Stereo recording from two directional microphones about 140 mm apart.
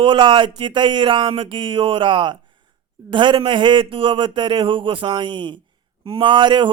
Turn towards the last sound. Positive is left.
turn(degrees=-35)  # may be behind; listen again after turning